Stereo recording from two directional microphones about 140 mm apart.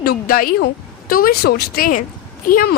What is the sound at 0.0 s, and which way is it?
Speech, 90° left.